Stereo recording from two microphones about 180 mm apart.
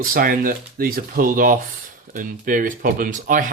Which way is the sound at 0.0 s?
50° right (ahead or behind).